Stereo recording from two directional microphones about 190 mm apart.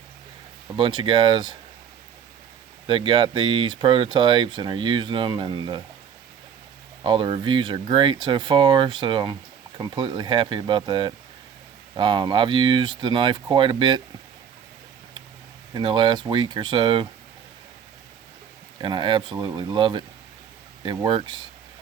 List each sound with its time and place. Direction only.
0.8 s speech: 25° right (ahead or behind)
2.8 s speech: 25° right (ahead or behind)
7.0 s speech: 25° right (ahead or behind)
15.7 s speech: 25° right (ahead or behind)
18.8 s speech: 25° right (ahead or behind)